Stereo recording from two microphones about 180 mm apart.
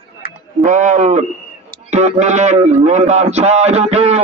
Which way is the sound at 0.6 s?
45° right (ahead or behind).